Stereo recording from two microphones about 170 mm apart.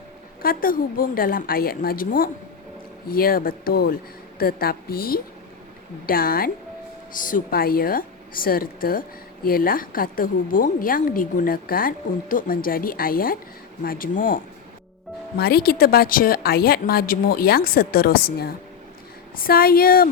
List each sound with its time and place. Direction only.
0.4 s speech: 55° left (ahead or behind)
15.4 s speech: 65° left (ahead or behind)